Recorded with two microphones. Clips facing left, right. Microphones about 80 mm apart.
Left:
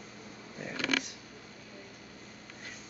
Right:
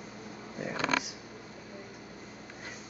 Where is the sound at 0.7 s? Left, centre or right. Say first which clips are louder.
Right 2 dB; right.